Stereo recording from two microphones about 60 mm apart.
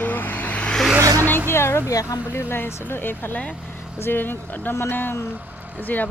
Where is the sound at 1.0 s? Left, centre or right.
Right.